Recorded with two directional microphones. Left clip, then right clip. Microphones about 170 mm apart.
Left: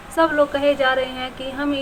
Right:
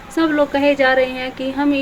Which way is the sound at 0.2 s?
20° right (ahead or behind).